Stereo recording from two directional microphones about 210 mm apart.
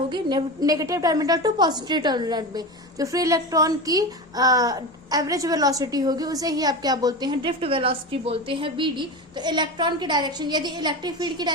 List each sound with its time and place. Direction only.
0.1 s a woman's voice: 20° right (ahead or behind)